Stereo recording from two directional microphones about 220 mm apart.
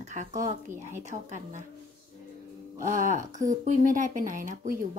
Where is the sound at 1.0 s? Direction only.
35° right (ahead or behind).